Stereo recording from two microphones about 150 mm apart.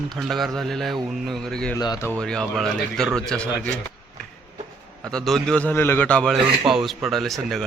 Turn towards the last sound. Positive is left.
turn(degrees=0)  # may be behind; listen again after turning